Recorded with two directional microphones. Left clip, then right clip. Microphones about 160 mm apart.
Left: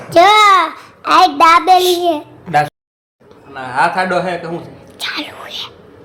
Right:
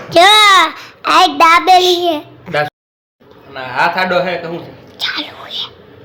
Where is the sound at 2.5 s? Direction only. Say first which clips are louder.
Left 2 dB; 75° left (ahead or behind).